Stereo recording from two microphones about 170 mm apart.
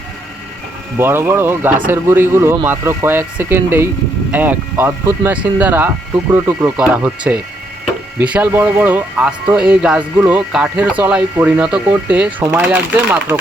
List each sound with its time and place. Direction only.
0.9 s speech: 15° right (ahead or behind)